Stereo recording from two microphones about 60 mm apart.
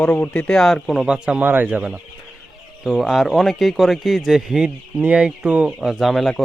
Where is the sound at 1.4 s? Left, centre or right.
Right.